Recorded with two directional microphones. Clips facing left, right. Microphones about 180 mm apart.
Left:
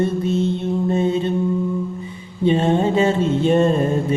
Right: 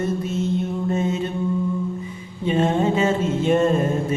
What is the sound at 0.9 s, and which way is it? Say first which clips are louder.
Mantra: left 4 dB; 30° left (ahead or behind).